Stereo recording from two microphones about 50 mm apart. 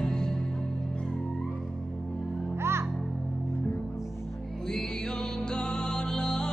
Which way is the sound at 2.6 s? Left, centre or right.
Right.